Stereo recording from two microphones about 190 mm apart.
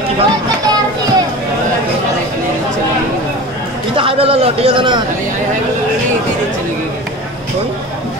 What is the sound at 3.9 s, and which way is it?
A man's voice, 30° right (ahead or behind).